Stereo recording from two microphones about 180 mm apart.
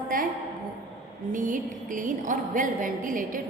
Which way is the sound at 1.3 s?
45° right (ahead or behind).